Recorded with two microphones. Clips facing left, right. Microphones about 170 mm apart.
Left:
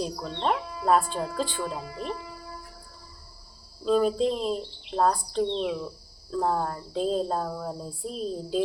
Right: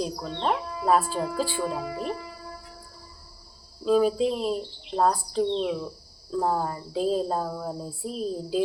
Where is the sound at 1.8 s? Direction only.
55° right (ahead or behind).